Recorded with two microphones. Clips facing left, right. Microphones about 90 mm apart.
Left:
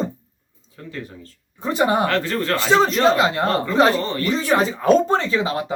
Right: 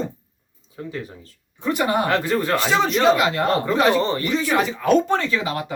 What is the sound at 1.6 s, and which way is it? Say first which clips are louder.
Speech: left 2 dB; 30° left (ahead or behind).